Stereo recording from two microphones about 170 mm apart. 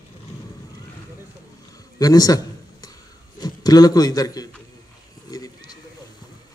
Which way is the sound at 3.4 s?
25° left (ahead or behind).